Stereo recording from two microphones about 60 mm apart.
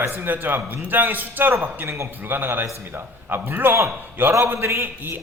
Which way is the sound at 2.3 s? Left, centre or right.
Right.